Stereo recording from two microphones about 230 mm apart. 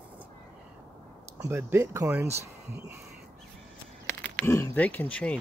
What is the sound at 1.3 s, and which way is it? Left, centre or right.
Speech, centre.